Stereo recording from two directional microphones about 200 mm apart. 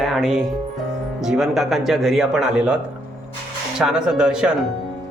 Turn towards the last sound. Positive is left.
turn(degrees=-5)  # may be behind; listen again after turning